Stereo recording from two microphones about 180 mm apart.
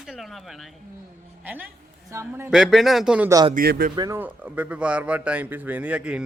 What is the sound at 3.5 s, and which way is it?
Speech, 55° right (ahead or behind).